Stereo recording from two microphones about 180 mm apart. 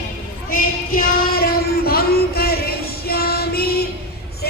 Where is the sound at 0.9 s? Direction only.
55° left (ahead or behind).